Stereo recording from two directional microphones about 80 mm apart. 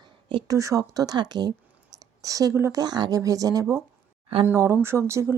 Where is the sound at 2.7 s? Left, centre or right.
Right.